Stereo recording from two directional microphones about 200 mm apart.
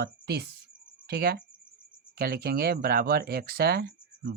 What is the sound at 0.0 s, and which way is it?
Speech, 55° right (ahead or behind).